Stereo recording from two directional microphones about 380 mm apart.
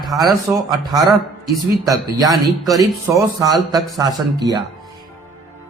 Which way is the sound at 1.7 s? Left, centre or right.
Centre.